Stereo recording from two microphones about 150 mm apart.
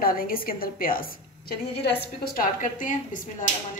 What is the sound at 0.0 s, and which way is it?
A woman's voice, 75° left (ahead or behind).